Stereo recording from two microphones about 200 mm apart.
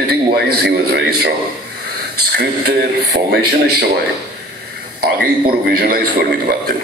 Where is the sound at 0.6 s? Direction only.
60° right (ahead or behind).